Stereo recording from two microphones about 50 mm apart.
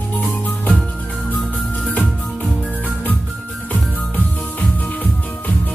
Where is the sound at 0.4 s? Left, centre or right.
Left.